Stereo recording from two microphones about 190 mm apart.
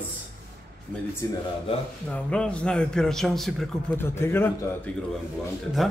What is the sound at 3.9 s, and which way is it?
Speech, 15° left (ahead or behind).